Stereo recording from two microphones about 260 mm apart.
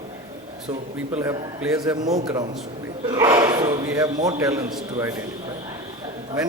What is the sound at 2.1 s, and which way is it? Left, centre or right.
A man's voice, centre.